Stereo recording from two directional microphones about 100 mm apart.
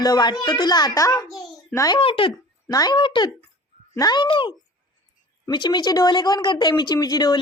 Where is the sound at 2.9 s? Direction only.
55° left (ahead or behind).